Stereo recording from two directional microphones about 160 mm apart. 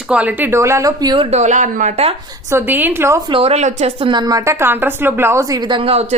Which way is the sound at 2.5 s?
15° right (ahead or behind).